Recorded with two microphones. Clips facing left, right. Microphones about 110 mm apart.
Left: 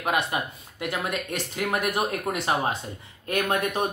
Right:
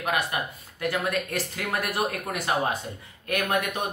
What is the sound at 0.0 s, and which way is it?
Speech, 25° left (ahead or behind).